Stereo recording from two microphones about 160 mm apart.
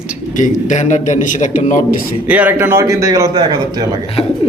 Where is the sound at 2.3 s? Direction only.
10° right (ahead or behind); by 3.9 s 25° right (ahead or behind).